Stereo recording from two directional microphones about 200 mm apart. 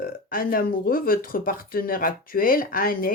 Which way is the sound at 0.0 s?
45° left (ahead or behind).